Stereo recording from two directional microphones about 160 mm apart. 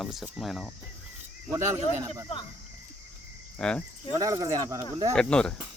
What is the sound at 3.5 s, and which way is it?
Cricket, 5° left (ahead or behind).